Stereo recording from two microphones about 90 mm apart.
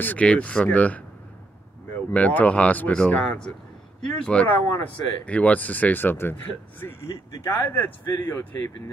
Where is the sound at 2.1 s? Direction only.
15° left (ahead or behind).